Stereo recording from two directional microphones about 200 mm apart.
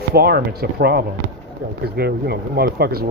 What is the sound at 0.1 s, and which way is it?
Speech, 50° right (ahead or behind).